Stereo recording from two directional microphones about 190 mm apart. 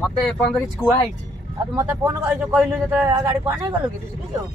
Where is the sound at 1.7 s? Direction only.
15° right (ahead or behind).